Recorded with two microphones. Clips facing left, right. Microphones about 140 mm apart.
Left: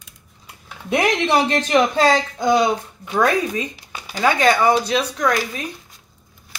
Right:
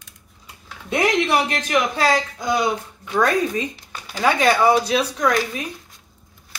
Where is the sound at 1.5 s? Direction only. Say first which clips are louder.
Left 4 dB; 30° left (ahead or behind).